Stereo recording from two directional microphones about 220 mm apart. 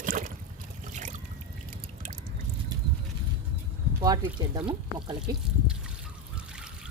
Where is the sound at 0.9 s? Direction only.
35° right (ahead or behind).